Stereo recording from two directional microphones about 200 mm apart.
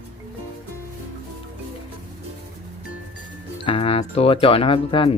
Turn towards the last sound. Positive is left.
turn(degrees=25)  # may be behind; listen again after turning